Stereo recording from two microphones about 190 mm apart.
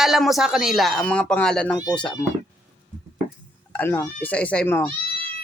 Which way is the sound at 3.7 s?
10° left (ahead or behind).